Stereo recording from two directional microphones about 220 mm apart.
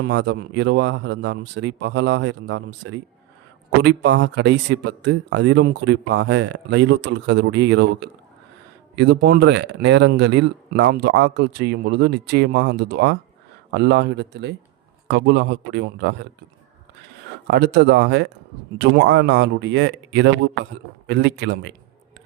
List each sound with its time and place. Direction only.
0.0 s speech: 50° right (ahead or behind)
17.5 s a man's voice: 50° right (ahead or behind)